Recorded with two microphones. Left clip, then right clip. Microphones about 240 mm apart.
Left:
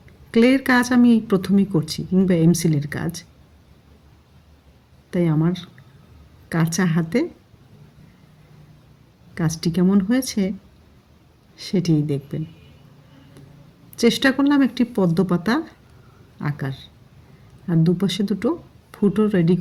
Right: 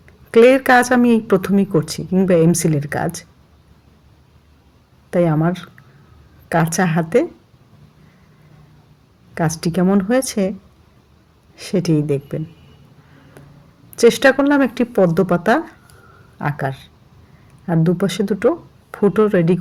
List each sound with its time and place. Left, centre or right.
0.3 s speech: centre
5.1 s speech: centre
9.3 s speech: centre
11.6 s speech: centre
13.9 s speech: centre